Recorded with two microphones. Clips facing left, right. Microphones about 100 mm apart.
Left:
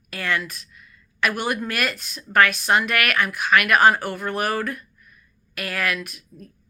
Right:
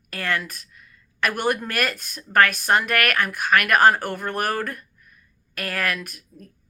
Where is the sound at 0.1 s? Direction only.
45° right (ahead or behind).